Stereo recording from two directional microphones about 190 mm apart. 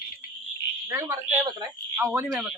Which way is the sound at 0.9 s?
15° right (ahead or behind).